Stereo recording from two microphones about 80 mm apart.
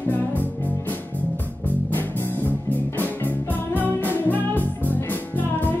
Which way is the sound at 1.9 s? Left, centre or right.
Left.